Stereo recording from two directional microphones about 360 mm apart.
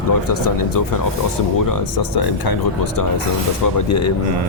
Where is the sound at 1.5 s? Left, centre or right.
Left.